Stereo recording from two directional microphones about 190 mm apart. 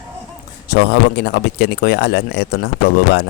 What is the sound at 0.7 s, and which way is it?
Speech, 60° left (ahead or behind).